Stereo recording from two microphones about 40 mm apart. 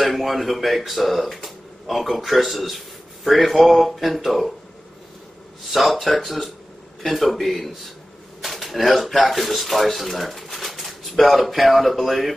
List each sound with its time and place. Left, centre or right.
0.0 s speech: centre
5.7 s speech: centre